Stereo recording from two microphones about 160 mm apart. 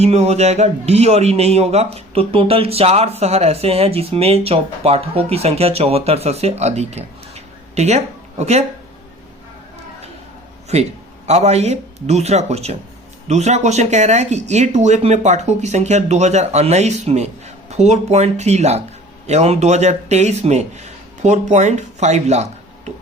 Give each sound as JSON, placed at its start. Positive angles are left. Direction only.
{"t": 0.0, "sound": "a man's voice", "side_deg": -40}
{"t": 10.7, "sound": "a man's voice", "side_deg": -40}